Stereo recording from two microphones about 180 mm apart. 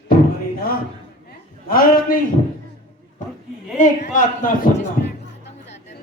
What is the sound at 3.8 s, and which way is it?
Speech, 45° left (ahead or behind).